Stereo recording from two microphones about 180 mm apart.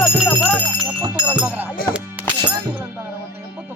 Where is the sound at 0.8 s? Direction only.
5° right (ahead or behind).